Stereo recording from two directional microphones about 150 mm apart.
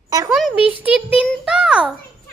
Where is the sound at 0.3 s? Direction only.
Centre (ahead or behind).